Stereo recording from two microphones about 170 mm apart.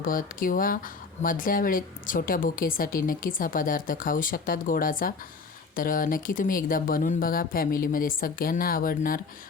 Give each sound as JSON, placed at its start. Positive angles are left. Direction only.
{"t": 0.0, "sound": "speech", "side_deg": 55}